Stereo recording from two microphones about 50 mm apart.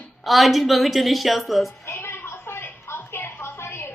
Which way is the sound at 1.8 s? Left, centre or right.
Left.